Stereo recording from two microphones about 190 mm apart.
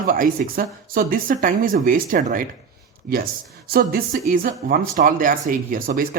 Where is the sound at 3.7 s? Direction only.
50° right (ahead or behind).